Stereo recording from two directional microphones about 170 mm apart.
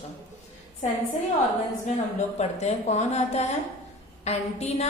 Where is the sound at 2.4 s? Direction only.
40° left (ahead or behind).